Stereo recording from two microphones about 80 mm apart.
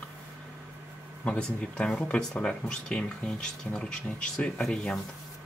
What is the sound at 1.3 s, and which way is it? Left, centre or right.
Speech, centre.